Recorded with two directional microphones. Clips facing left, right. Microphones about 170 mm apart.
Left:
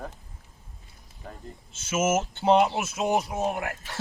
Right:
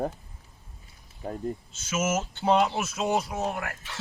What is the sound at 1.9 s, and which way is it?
Speech, 20° left (ahead or behind).